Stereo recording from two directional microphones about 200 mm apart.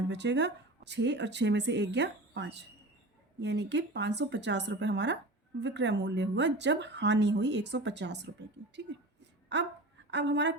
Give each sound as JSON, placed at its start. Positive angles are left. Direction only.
{"t": 0.1, "sound": "speech", "side_deg": -60}